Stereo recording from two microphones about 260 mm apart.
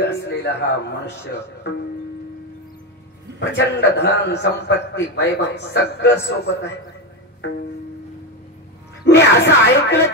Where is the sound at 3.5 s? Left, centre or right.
Left.